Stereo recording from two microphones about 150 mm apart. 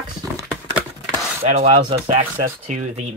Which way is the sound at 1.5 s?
45° right (ahead or behind).